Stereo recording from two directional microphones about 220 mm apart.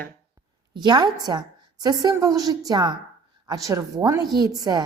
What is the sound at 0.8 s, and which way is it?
A woman's voice, 20° right (ahead or behind).